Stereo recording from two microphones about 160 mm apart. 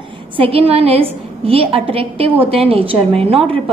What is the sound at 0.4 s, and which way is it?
A woman's voice, 35° right (ahead or behind).